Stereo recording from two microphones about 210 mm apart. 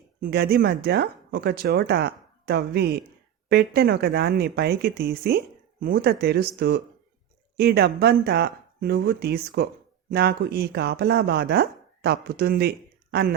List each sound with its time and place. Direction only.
0.2 s speech: 45° right (ahead or behind)